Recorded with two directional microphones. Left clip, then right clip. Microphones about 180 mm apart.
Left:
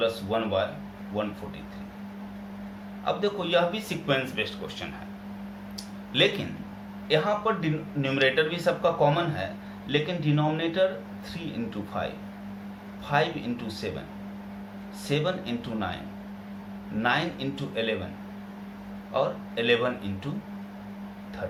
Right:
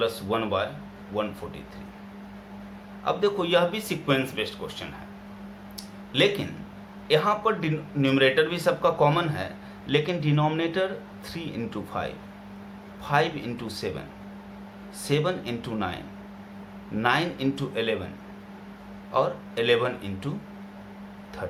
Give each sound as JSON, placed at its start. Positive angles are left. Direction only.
{"t": 0.0, "sound": "speech", "side_deg": -40}
{"t": 3.0, "sound": "speech", "side_deg": -40}
{"t": 6.1, "sound": "speech", "side_deg": -25}
{"t": 7.1, "sound": "speech", "side_deg": -45}
{"t": 15.0, "sound": "speech", "side_deg": -40}
{"t": 17.0, "sound": "speech", "side_deg": -40}
{"t": 19.1, "sound": "speech", "side_deg": -40}